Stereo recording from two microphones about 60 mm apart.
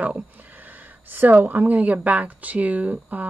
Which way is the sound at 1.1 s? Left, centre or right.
Right.